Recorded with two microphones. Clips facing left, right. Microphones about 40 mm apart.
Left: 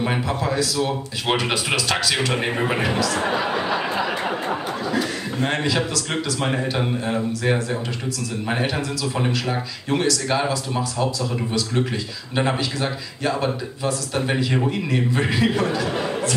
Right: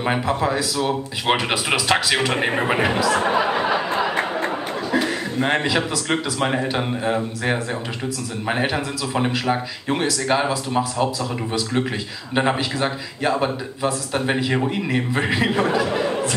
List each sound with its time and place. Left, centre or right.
0.0 s speech: centre
4.9 s speech: right